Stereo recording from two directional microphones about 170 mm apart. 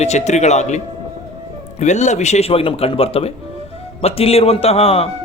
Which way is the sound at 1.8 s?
45° left (ahead or behind).